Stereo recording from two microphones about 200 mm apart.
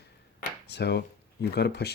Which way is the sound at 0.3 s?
55° left (ahead or behind).